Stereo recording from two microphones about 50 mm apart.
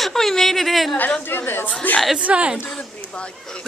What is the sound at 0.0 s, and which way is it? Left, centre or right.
Speech, centre.